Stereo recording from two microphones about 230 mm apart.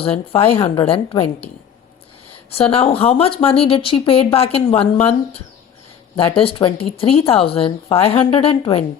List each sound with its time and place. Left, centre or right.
0.0 s speech: left
2.7 s speech: left